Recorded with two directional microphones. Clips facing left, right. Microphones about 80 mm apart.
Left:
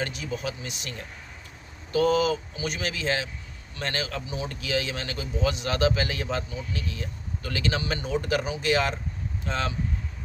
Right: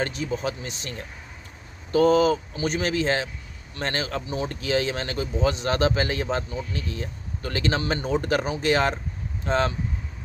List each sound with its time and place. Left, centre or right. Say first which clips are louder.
0.0 s speech: right 4 dB; right